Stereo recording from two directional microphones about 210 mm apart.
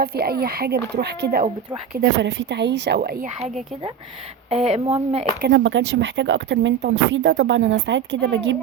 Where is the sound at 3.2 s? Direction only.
30° right (ahead or behind).